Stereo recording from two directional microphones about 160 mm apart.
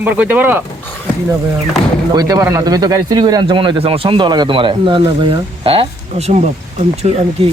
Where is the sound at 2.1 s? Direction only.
25° right (ahead or behind); by 7.2 s 45° right (ahead or behind).